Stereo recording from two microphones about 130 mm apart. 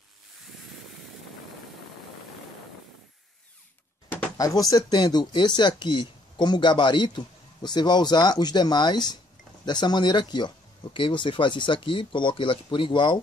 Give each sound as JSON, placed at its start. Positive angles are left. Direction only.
{"t": 4.4, "sound": "speech", "side_deg": 30}